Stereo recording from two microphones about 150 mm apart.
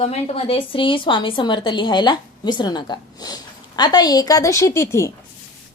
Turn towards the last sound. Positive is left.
turn(degrees=20)  # may be behind; listen again after turning